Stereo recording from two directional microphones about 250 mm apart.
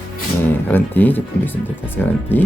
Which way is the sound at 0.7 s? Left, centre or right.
Centre.